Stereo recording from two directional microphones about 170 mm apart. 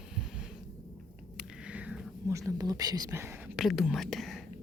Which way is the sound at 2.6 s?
20° right (ahead or behind).